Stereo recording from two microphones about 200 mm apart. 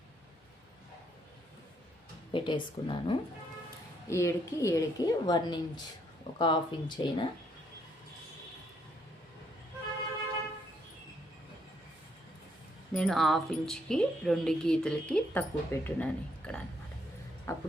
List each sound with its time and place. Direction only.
2.3 s a woman's voice: 25° left (ahead or behind)
12.9 s a woman's voice: 5° left (ahead or behind)